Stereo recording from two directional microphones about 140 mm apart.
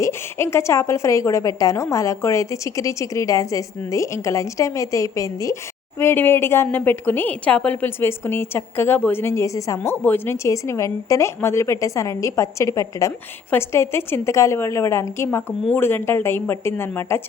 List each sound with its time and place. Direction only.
0.0 s a woman's voice: 20° left (ahead or behind)